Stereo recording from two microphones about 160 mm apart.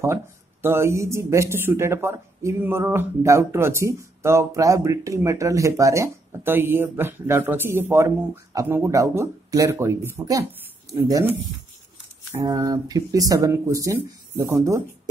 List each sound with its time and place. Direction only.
0.0 s speech: 15° right (ahead or behind)
12.4 s speech: 20° right (ahead or behind)